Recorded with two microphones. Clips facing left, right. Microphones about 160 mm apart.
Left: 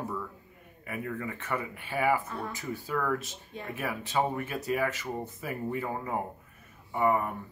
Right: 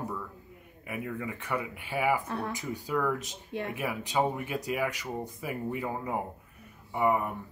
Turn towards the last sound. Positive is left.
turn(degrees=-10)  # may be behind; listen again after turning